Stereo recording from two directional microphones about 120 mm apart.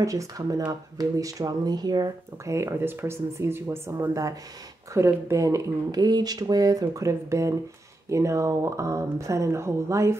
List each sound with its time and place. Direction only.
0.0 s speech: 30° right (ahead or behind)